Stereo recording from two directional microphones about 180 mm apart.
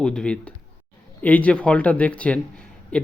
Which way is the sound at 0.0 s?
5° left (ahead or behind).